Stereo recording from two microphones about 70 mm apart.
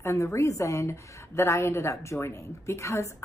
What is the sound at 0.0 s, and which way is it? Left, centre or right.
A woman's voice, left.